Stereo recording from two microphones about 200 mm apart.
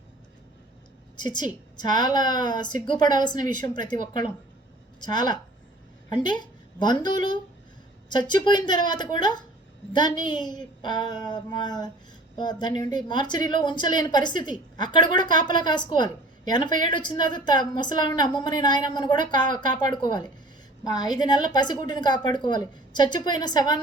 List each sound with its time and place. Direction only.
1.2 s a woman's voice: 20° left (ahead or behind)